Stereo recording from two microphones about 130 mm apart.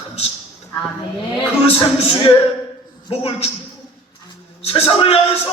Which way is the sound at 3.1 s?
50° left (ahead or behind).